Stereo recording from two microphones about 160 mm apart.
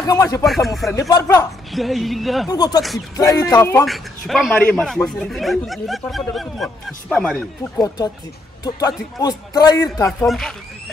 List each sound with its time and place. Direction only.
0.0 s speech: 25° left (ahead or behind)
0.5 s speech: centre (ahead or behind)
0.9 s a man's voice: 20° left (ahead or behind)
1.7 s speech: centre (ahead or behind)
2.4 s speech: 25° left (ahead or behind)
3.8 s a man's voice: centre (ahead or behind)
7.7 s speech: 25° left (ahead or behind)
10.0 s speech: centre (ahead or behind)